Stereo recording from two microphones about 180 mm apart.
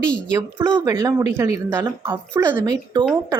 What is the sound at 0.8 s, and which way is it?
Speech, 20° right (ahead or behind).